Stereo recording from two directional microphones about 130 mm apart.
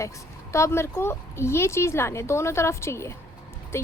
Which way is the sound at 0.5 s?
20° left (ahead or behind).